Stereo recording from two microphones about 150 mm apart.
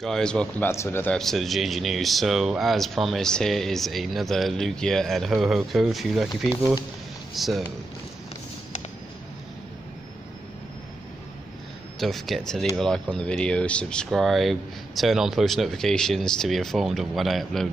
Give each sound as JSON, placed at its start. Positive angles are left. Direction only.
{"t": 0.0, "sound": "speech", "side_deg": 5}
{"t": 0.7, "sound": "a man's voice", "side_deg": 15}
{"t": 1.1, "sound": "speech", "side_deg": 0}
{"t": 12.0, "sound": "speech", "side_deg": 0}